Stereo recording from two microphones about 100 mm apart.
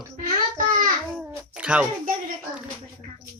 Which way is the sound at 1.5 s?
10° right (ahead or behind).